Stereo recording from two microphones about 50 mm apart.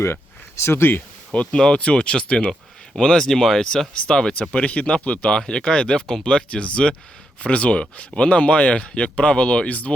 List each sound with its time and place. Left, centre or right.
0.6 s speech: left
1.3 s speech: left
5.4 s speech: centre